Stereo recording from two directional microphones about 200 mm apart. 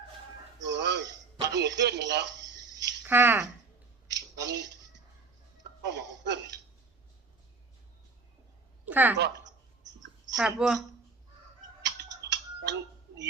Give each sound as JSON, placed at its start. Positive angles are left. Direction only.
{"t": 0.6, "sound": "music", "side_deg": -60}
{"t": 1.5, "sound": "a sound", "side_deg": -60}
{"t": 3.0, "sound": "speech", "side_deg": -10}
{"t": 4.1, "sound": "a sound", "side_deg": -60}
{"t": 5.8, "sound": "a sound", "side_deg": -60}
{"t": 8.9, "sound": "speech", "side_deg": -10}
{"t": 9.1, "sound": "speech", "side_deg": -60}
{"t": 10.3, "sound": "a woman's voice", "side_deg": -5}
{"t": 11.8, "sound": "typing", "side_deg": -60}
{"t": 12.3, "sound": "tick", "side_deg": -60}